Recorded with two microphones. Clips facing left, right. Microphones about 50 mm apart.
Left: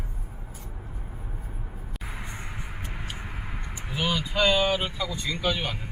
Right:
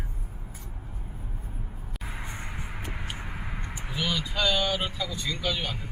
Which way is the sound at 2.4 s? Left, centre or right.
Right.